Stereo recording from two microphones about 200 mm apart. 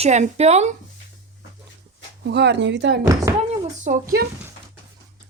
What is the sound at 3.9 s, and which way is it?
Speech, 35° right (ahead or behind).